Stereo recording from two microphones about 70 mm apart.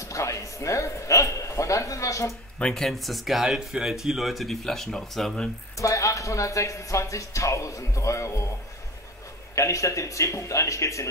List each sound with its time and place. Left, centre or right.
0.0 s a sound: left
2.7 s speech: centre
5.8 s speech: left
9.6 s speech: left